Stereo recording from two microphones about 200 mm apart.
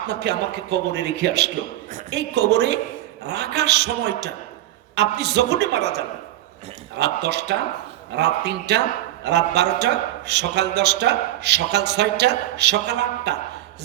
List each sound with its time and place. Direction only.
0.1 s a man's voice: 55° right (ahead or behind)